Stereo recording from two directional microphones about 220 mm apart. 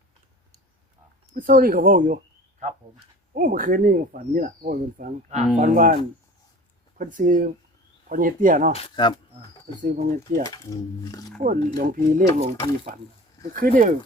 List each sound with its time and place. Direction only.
1.3 s speech: 40° right (ahead or behind)
3.3 s speech: 40° right (ahead or behind)
7.0 s speech: 35° right (ahead or behind)
8.7 s speech: 25° left (ahead or behind)
9.8 s speech: 35° right (ahead or behind)
10.5 s speech: 15° left (ahead or behind)
11.3 s speech: 40° right (ahead or behind)
13.5 s speech: 40° right (ahead or behind)